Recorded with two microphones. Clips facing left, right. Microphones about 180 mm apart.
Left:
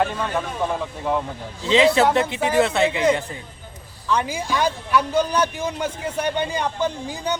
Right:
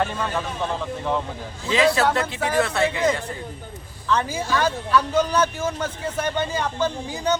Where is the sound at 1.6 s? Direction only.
20° left (ahead or behind).